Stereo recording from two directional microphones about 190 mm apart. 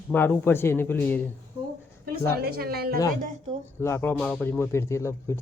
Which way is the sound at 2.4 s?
55° right (ahead or behind).